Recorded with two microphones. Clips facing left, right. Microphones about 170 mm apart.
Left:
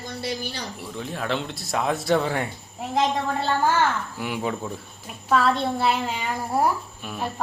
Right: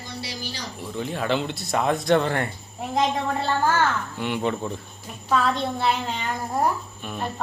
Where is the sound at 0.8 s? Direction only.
Centre (ahead or behind).